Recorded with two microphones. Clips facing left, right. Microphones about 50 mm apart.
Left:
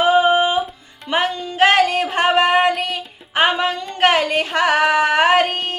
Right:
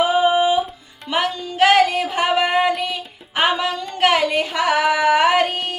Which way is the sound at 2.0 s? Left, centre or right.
Left.